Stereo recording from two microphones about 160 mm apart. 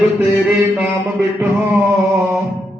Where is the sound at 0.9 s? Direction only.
15° right (ahead or behind).